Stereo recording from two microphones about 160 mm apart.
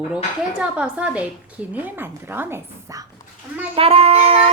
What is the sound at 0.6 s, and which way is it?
Speech, 5° right (ahead or behind).